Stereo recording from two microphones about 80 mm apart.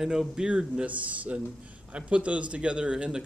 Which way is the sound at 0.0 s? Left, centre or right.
Centre.